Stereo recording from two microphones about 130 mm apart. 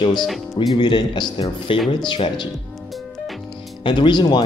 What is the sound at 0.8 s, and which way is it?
Speech, 35° left (ahead or behind).